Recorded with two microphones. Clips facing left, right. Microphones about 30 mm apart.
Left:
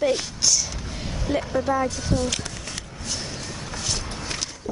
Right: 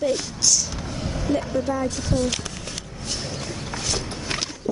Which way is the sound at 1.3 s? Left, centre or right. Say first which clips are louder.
Left 1 dB; centre.